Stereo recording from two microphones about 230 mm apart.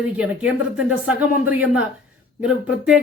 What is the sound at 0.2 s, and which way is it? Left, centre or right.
Speech, centre.